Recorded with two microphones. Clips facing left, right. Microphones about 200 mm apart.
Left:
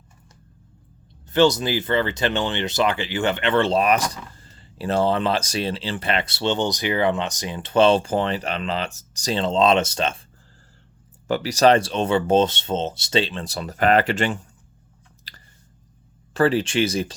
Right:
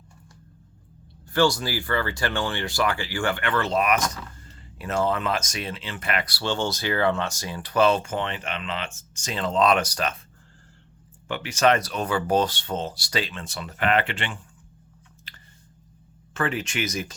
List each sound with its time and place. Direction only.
1.2 s speech: 20° left (ahead or behind)
11.3 s speech: 40° left (ahead or behind)
15.3 s a sound: 35° left (ahead or behind)
16.3 s speech: 35° left (ahead or behind)